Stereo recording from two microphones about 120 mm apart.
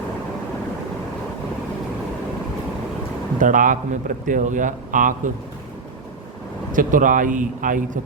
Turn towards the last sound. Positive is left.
turn(degrees=-90)